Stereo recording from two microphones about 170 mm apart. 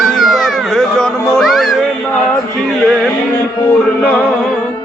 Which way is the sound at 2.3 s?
Centre (ahead or behind).